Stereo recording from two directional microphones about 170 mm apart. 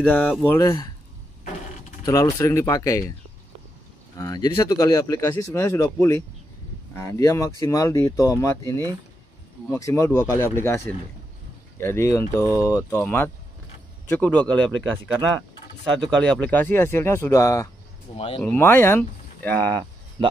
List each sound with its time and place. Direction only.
0.0 s speech: 10° left (ahead or behind)
2.3 s speech: 15° left (ahead or behind)
4.2 s speech: 20° left (ahead or behind)
11.8 s speech: 15° left (ahead or behind)
16.1 s speech: 5° left (ahead or behind)
18.1 s speech: 35° left (ahead or behind)
18.4 s speech: 10° left (ahead or behind)